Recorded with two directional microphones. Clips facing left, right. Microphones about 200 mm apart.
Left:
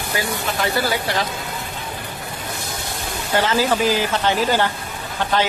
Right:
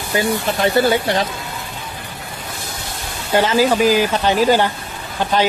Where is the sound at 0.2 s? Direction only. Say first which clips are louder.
Right 7 dB; 25° right (ahead or behind).